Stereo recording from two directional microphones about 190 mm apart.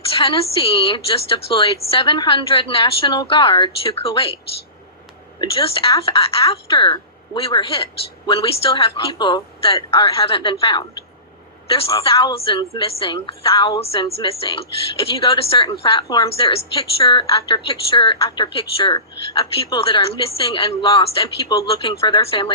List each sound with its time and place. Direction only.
0.0 s a woman's voice: 30° left (ahead or behind)
5.4 s a woman's voice: 30° left (ahead or behind)
12.0 s a woman's voice: 25° left (ahead or behind)